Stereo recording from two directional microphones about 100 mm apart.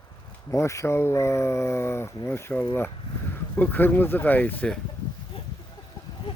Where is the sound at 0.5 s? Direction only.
30° left (ahead or behind).